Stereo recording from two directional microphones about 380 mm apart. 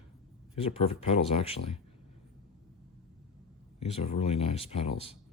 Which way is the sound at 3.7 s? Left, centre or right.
Centre.